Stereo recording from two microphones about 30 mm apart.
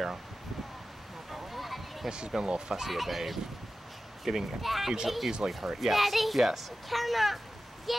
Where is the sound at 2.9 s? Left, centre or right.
Centre.